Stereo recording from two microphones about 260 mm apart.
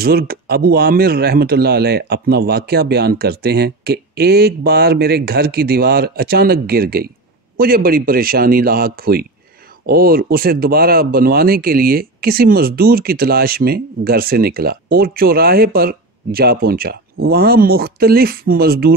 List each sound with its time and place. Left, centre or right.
0.0 s speech: right